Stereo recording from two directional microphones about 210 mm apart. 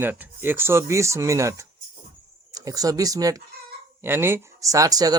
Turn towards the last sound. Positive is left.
turn(degrees=-15)  # may be behind; listen again after turning